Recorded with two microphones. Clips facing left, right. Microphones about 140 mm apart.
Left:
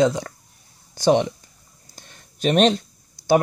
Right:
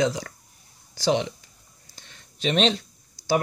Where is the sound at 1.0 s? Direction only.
45° left (ahead or behind).